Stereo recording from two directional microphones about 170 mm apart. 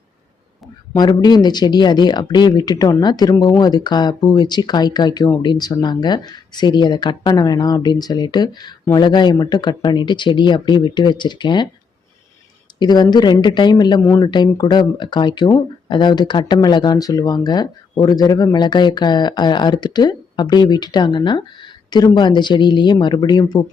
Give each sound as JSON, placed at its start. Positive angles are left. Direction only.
{"t": 0.9, "sound": "speech", "side_deg": 25}
{"t": 12.8, "sound": "speech", "side_deg": 25}